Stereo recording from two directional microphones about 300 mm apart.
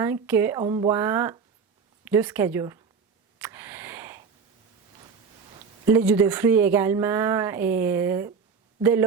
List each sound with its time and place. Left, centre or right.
0.0 s speech: centre
3.3 s a sound: centre
5.8 s speech: centre